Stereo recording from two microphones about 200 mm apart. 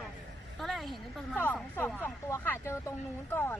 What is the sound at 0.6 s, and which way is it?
A woman's voice, centre (ahead or behind).